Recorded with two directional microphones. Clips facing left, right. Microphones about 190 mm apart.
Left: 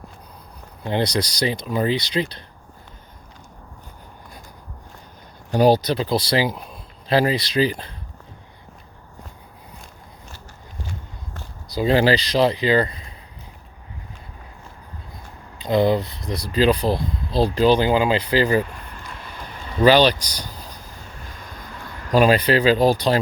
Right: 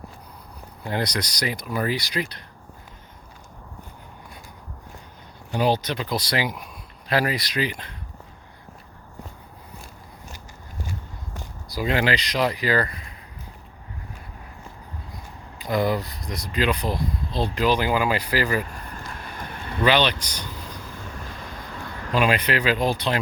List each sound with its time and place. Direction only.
0.9 s speech: 25° left (ahead or behind)
5.5 s a man's voice: 40° left (ahead or behind)
11.7 s speech: 30° left (ahead or behind)
15.5 s speech: 25° left (ahead or behind)
19.8 s speech: 35° left (ahead or behind)
22.1 s speech: 35° left (ahead or behind)